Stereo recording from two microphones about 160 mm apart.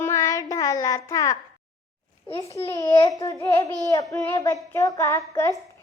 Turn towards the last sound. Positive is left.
turn(degrees=20)  # may be behind; listen again after turning